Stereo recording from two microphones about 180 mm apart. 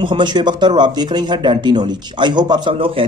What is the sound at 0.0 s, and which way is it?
Speech, 25° right (ahead or behind).